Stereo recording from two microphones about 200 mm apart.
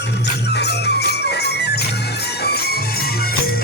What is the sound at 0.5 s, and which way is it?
Music, 55° left (ahead or behind).